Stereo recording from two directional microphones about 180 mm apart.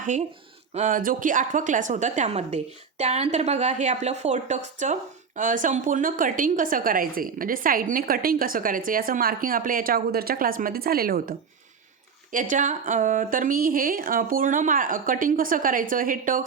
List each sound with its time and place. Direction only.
0.0 s speech: 45° right (ahead or behind)